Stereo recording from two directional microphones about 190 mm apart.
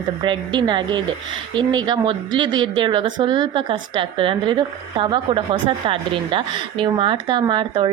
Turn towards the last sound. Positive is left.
turn(degrees=-25)  # may be behind; listen again after turning